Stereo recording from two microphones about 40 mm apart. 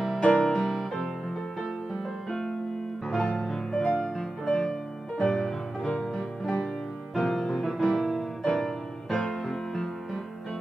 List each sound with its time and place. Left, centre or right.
0.2 s music: left
0.5 s music: centre
3.4 s music: centre
6.1 s music: centre
7.2 s music: centre